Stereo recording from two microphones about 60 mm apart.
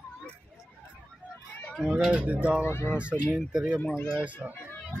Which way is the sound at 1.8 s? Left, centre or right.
Centre.